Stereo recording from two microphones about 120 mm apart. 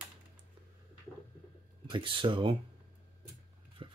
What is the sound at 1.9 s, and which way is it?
Speech, 45° right (ahead or behind).